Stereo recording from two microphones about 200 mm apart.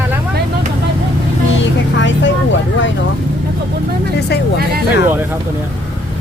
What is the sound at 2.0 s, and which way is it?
Vehicle, 65° left (ahead or behind).